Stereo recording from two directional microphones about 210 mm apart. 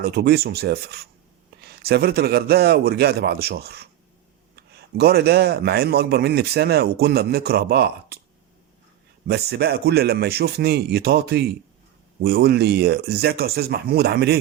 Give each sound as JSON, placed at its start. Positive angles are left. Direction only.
{"t": 0.0, "sound": "a man's voice", "side_deg": -50}
{"t": 9.2, "sound": "a man's voice", "side_deg": -50}